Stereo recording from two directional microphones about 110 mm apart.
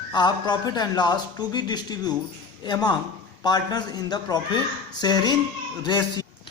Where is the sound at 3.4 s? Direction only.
40° left (ahead or behind).